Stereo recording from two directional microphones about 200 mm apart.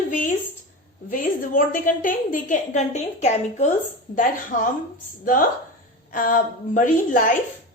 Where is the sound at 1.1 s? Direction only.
40° left (ahead or behind).